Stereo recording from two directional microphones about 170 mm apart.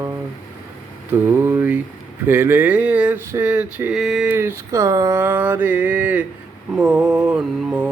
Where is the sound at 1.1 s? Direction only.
15° right (ahead or behind).